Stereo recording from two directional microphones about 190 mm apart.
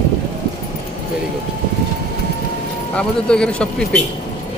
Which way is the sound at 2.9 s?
5° left (ahead or behind).